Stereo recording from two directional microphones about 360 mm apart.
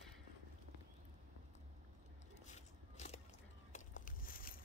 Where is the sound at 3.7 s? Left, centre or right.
Left.